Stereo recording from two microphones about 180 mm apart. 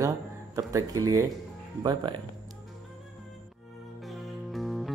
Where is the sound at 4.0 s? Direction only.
Centre (ahead or behind).